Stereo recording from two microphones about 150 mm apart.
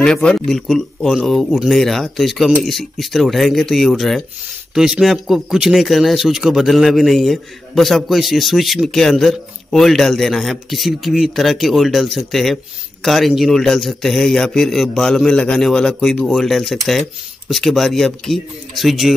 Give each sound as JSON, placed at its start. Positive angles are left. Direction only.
{"t": 0.0, "sound": "speech", "side_deg": 5}